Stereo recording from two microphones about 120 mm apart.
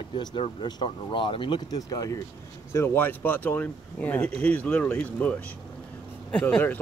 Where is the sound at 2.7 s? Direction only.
20° left (ahead or behind).